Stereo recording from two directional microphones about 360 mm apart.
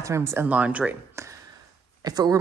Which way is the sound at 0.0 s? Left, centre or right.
Centre.